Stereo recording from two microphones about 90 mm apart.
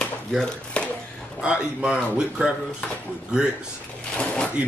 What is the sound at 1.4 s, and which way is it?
A man's voice, 10° right (ahead or behind).